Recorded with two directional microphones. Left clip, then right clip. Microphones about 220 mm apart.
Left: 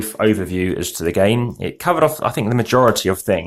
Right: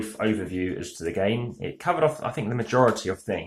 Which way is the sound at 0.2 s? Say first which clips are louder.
Left 10 dB; 50° left (ahead or behind).